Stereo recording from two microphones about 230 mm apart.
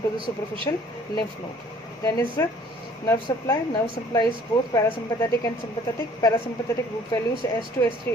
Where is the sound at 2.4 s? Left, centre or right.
Centre.